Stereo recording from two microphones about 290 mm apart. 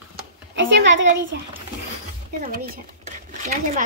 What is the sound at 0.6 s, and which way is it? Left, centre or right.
Speech, right.